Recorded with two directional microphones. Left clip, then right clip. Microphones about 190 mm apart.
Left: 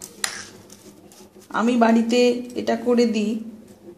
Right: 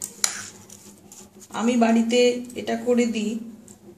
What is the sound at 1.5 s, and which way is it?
Speech, 20° left (ahead or behind).